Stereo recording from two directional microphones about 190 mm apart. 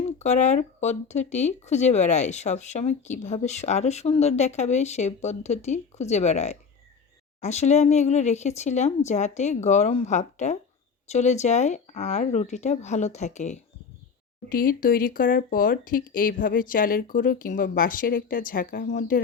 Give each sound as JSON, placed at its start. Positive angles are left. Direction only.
{"t": 0.2, "sound": "speech", "side_deg": 35}